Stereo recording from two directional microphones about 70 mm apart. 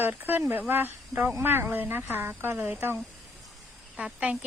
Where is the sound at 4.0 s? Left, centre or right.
Centre.